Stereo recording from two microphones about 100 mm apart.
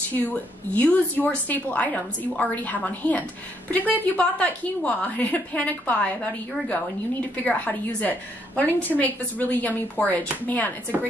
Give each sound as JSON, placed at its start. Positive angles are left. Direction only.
{"t": 0.1, "sound": "a woman's voice", "side_deg": 15}